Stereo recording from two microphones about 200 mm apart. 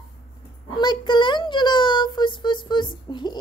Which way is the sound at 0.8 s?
20° left (ahead or behind).